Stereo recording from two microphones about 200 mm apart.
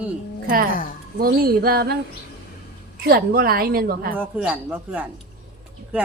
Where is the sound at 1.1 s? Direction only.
50° right (ahead or behind).